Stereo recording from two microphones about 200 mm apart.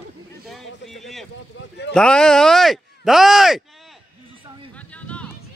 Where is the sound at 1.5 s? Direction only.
70° left (ahead or behind).